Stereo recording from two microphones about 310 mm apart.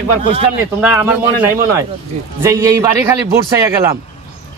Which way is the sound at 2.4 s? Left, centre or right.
Centre.